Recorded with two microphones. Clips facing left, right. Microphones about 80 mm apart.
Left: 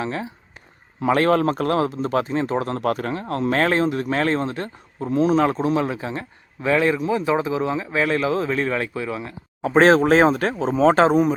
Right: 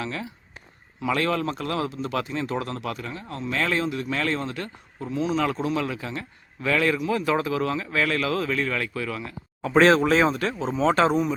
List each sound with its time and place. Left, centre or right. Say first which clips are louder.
0.0 s speech: left 5 dB; left
1.0 s a man's voice: left 7 dB; left